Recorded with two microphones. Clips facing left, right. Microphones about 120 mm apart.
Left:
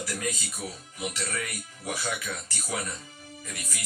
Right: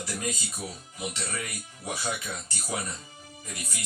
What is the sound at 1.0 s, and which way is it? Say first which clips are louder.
Speech: left 1 dB; 25° right (ahead or behind).